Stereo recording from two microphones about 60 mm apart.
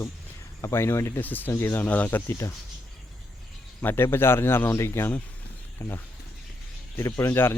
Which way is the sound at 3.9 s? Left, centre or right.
Left.